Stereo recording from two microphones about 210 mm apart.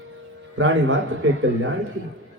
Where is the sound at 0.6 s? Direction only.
65° right (ahead or behind).